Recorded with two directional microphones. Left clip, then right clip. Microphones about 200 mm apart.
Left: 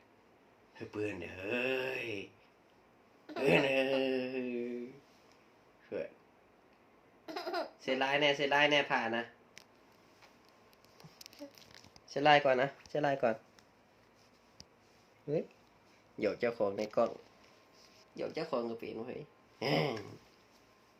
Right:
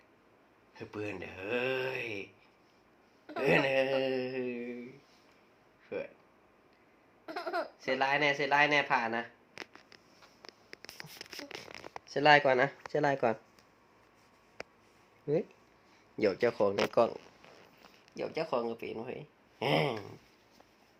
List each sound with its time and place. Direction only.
0.8 s speech: 15° right (ahead or behind)
3.4 s a sound: 15° right (ahead or behind)
5.9 s a sound: 15° right (ahead or behind)
7.3 s laughter: 10° left (ahead or behind)
7.8 s speech: 15° right (ahead or behind)
12.0 s speech: 40° right (ahead or behind)
15.3 s speech: 40° right (ahead or behind)
18.2 s speech: 30° right (ahead or behind)